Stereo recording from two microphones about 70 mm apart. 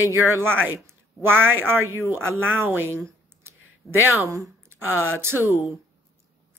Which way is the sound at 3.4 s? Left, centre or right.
Right.